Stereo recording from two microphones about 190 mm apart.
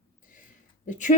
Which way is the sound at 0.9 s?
40° left (ahead or behind).